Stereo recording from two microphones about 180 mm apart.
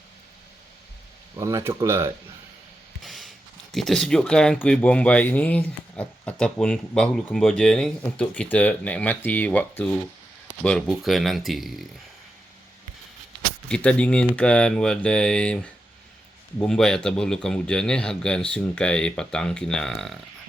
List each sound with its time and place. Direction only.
1.4 s speech: 15° right (ahead or behind)
3.0 s a man's voice: centre (ahead or behind)
13.7 s a man's voice: 5° left (ahead or behind)